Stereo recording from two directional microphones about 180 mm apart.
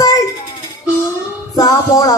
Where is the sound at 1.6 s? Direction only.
15° left (ahead or behind).